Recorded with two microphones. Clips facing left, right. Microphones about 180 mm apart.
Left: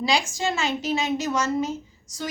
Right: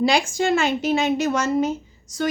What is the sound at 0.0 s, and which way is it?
A woman's voice, 55° right (ahead or behind).